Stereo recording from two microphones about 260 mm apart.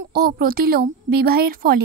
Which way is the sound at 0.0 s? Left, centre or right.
Right.